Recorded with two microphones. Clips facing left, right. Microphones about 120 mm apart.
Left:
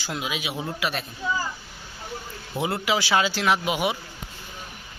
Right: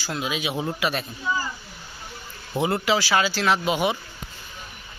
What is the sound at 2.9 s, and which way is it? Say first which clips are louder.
Speech: right 1 dB; 20° left (ahead or behind).